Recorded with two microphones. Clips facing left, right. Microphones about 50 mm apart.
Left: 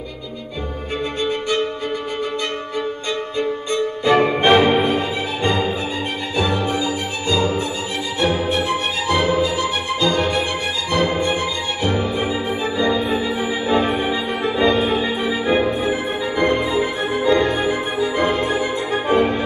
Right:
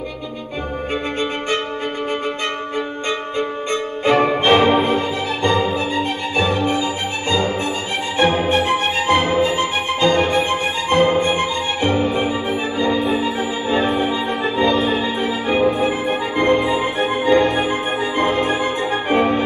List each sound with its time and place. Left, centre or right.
3.1 s music: right
6.3 s music: right
14.6 s music: left
15.6 s music: right